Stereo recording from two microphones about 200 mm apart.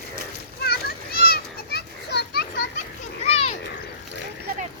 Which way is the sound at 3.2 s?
30° left (ahead or behind).